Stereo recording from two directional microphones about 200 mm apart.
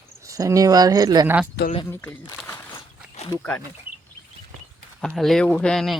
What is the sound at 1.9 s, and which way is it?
Speech, 10° left (ahead or behind).